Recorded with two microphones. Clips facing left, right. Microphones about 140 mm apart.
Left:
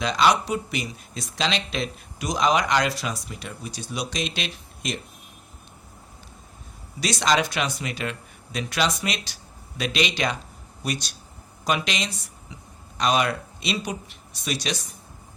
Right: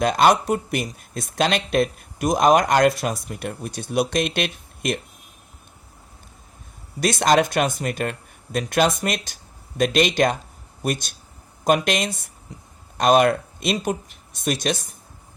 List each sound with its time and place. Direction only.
0.0 s speech: 50° right (ahead or behind)
7.0 s speech: 50° right (ahead or behind)